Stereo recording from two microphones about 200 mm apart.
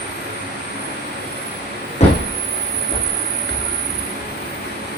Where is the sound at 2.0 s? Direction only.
35° left (ahead or behind).